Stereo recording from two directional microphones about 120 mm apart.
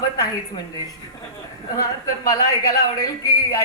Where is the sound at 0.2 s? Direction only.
35° left (ahead or behind).